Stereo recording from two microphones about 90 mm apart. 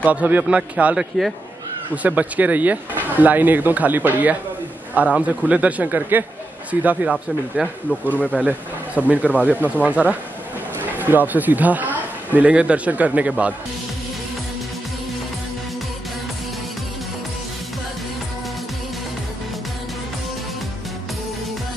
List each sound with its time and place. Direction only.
0.0 s a man's voice: 15° right (ahead or behind)
2.0 s a man's voice: 15° right (ahead or behind)
7.6 s a man's voice: 5° right (ahead or behind)
8.1 s speech: 15° left (ahead or behind)
8.4 s a man's voice: 15° right (ahead or behind)